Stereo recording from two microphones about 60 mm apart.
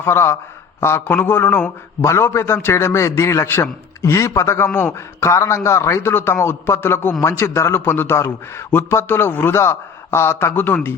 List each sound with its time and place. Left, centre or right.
0.0 s a man's voice: left
3.5 s a man's voice: left
4.1 s a man's voice: left
10.5 s speech: left